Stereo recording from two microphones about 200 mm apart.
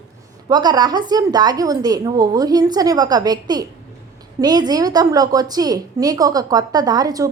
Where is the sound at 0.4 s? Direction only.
20° right (ahead or behind).